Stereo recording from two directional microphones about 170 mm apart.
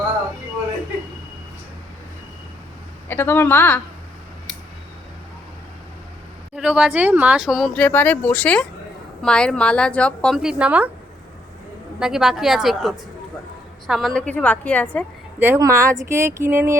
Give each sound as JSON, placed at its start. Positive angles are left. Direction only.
{"t": 3.1, "sound": "a woman's voice", "side_deg": 10}
{"t": 6.6, "sound": "speech", "side_deg": -5}
{"t": 11.9, "sound": "a woman's voice", "side_deg": -5}
{"t": 15.4, "sound": "speech", "side_deg": -15}